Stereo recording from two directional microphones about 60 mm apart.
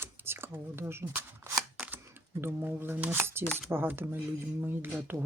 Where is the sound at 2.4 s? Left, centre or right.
Right.